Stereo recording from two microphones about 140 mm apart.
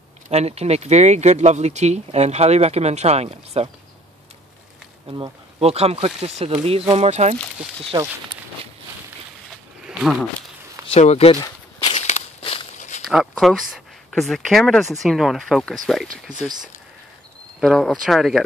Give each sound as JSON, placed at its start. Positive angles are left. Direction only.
{"t": 0.3, "sound": "speech", "side_deg": -50}
{"t": 5.6, "sound": "speech", "side_deg": -45}
{"t": 7.9, "sound": "speech", "side_deg": -25}
{"t": 9.8, "sound": "a sound", "side_deg": -5}
{"t": 10.9, "sound": "speech", "side_deg": 50}
{"t": 11.9, "sound": "walk", "side_deg": 50}
{"t": 12.7, "sound": "walk", "side_deg": 60}
{"t": 13.1, "sound": "speech", "side_deg": 0}